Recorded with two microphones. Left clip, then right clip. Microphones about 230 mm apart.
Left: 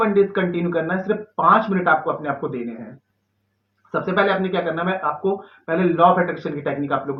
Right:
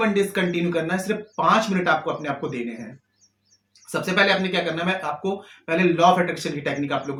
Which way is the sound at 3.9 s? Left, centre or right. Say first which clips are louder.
Left 1 dB; right.